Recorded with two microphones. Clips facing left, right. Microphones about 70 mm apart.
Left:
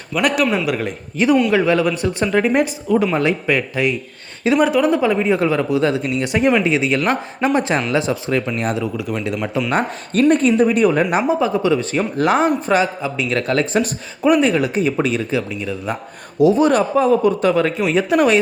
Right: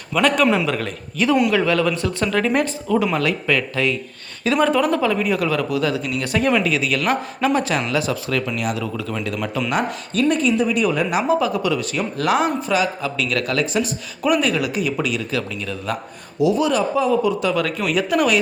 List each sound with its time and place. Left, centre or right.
0.1 s a man's voice: centre; by 8.8 s left
8.8 s a man's voice: centre
9.6 s speech: left
11.2 s speech: left
15.4 s speech: centre
16.4 s speech: left